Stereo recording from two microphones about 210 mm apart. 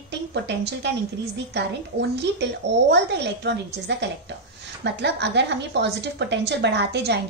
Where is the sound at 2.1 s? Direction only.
55° right (ahead or behind).